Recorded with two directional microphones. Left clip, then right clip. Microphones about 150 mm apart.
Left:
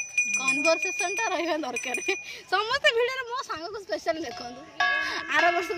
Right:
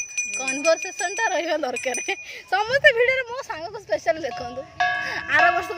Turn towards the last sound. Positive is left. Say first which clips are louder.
# right 5 dB
turn(degrees=-35)  # may be behind; listen again after turning